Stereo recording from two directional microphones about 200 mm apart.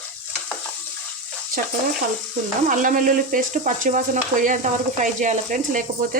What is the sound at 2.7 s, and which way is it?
Speech, 40° right (ahead or behind).